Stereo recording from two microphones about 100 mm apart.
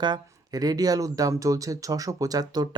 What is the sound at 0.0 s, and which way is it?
Speech, 45° right (ahead or behind).